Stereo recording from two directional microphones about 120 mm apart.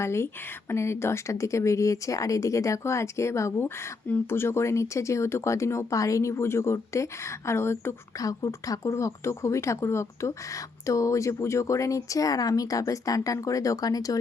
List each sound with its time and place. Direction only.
0.0 s speech: 20° left (ahead or behind)